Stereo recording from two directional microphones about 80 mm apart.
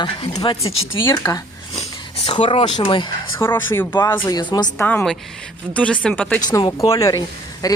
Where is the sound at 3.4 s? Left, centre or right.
Left.